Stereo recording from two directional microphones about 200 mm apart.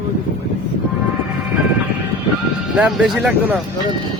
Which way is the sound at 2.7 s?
5° right (ahead or behind).